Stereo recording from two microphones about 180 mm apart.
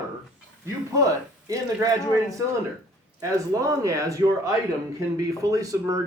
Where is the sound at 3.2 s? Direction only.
20° right (ahead or behind).